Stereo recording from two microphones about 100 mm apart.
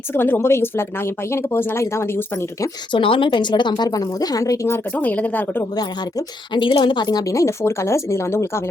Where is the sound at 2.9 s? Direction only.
60° left (ahead or behind); by 5.6 s 15° left (ahead or behind).